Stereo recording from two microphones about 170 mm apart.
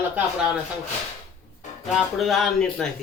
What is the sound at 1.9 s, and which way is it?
A man's voice, centre (ahead or behind).